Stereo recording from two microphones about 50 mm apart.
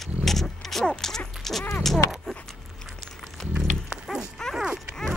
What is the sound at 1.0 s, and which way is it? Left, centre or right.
Dog, centre.